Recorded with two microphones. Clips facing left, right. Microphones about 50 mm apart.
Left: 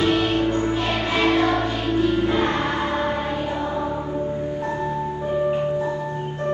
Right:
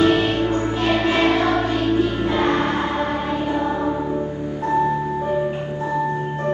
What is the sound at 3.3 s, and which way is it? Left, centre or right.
Music, right.